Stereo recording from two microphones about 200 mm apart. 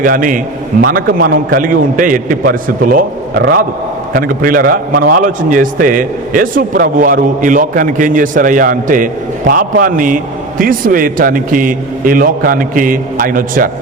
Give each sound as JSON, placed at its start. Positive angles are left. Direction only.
{"t": 0.0, "sound": "a man's voice", "side_deg": -40}